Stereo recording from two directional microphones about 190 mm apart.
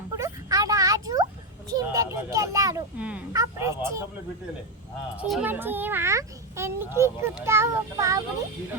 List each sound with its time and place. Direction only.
0.1 s a sound: 15° right (ahead or behind)
1.7 s a child's voice: 15° right (ahead or behind)
5.3 s a child's voice: 10° right (ahead or behind)